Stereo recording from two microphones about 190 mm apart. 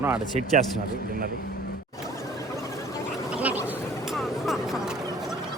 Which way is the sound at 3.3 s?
10° right (ahead or behind).